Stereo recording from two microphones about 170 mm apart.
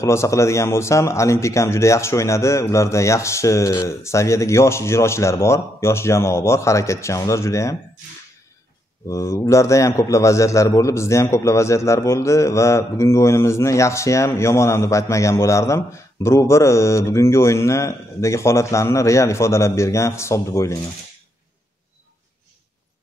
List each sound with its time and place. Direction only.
0.0 s a man's voice: 15° left (ahead or behind)
9.1 s a man's voice: 15° left (ahead or behind)